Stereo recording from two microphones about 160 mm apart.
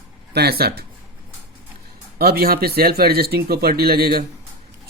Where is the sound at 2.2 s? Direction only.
70° right (ahead or behind).